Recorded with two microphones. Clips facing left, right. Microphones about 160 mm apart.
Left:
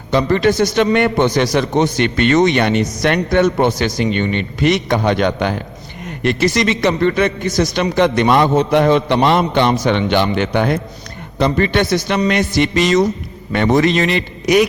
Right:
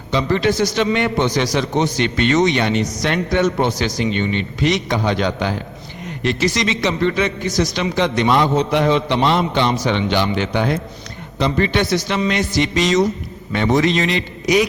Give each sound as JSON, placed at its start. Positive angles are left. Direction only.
{"t": 0.1, "sound": "a man's voice", "side_deg": 55}